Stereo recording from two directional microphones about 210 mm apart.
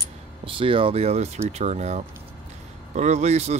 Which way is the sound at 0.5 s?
25° right (ahead or behind).